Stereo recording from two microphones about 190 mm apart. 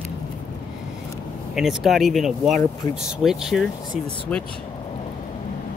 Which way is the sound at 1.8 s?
Centre (ahead or behind).